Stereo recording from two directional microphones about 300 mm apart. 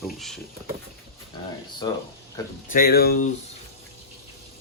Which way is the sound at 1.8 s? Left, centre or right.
Centre.